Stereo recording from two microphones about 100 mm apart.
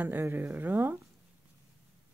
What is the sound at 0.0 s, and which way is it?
Speech, 20° right (ahead or behind).